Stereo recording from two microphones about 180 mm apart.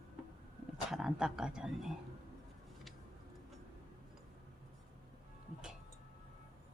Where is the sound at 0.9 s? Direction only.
Centre (ahead or behind).